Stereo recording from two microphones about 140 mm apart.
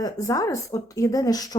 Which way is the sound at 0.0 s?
25° left (ahead or behind).